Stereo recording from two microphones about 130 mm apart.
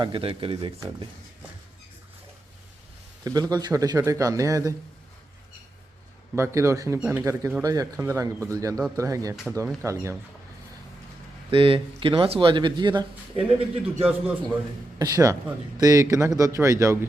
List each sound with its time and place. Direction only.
0.0 s speech: 40° right (ahead or behind)
3.2 s a man's voice: 30° right (ahead or behind)
6.3 s a man's voice: 20° right (ahead or behind)
11.5 s speech: 45° right (ahead or behind)
14.9 s a man's voice: 30° right (ahead or behind)